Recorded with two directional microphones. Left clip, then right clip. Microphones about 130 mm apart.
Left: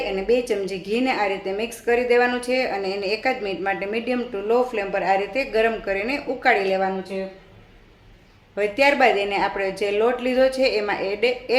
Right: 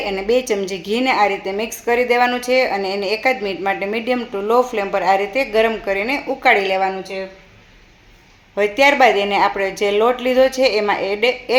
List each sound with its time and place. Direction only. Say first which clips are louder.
0.0 s a woman's voice: right 3 dB; 30° right (ahead or behind)
8.5 s a woman's voice: right 5 dB; 20° right (ahead or behind)